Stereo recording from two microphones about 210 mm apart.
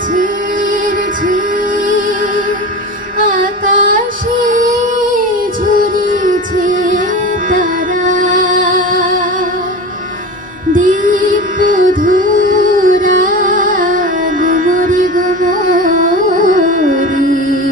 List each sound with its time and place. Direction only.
1.9 s music: 40° right (ahead or behind)
3.2 s female singing: 40° right (ahead or behind)
5.7 s music: 40° right (ahead or behind)
10.7 s music: 40° right (ahead or behind)